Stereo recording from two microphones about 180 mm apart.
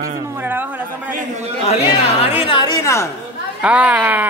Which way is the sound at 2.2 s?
30° left (ahead or behind).